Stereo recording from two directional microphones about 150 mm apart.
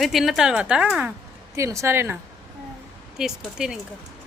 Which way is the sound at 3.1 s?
5° right (ahead or behind).